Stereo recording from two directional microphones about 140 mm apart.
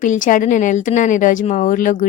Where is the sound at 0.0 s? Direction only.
65° left (ahead or behind).